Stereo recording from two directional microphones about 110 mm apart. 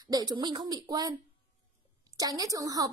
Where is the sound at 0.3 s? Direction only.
40° right (ahead or behind).